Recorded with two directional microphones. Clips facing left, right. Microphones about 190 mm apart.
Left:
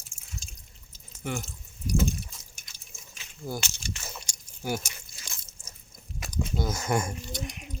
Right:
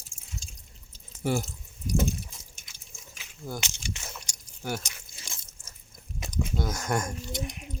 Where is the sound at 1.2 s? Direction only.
35° right (ahead or behind).